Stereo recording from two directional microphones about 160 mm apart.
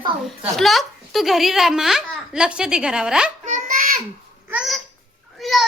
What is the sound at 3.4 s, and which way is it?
Speech, 50° right (ahead or behind).